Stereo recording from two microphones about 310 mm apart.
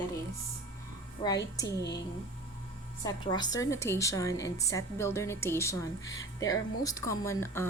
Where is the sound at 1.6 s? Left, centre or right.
Left.